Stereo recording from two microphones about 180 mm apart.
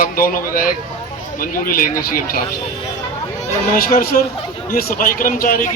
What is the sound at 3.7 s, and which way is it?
A man's voice, 55° left (ahead or behind).